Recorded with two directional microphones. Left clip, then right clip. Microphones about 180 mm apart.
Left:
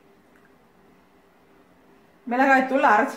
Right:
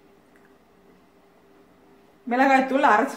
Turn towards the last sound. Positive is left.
turn(degrees=-10)  # may be behind; listen again after turning